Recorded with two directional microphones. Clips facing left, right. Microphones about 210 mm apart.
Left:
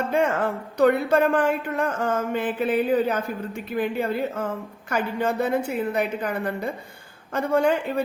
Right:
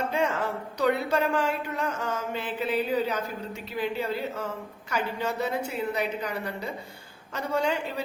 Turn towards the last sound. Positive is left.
turn(degrees=55)  # may be behind; listen again after turning